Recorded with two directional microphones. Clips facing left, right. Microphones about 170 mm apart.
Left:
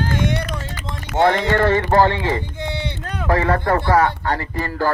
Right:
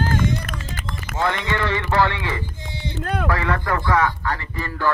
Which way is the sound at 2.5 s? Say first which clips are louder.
Left 6 dB; 70° left (ahead or behind).